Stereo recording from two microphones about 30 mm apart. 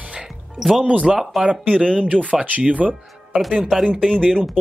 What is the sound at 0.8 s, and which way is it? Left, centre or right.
Speech, right.